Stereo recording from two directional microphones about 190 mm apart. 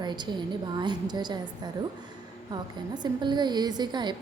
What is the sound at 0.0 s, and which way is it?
A woman's voice, 25° right (ahead or behind).